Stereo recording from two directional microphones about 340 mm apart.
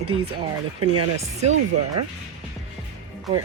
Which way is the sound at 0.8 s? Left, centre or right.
Right.